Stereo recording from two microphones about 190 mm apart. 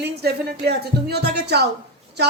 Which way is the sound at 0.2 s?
55° right (ahead or behind).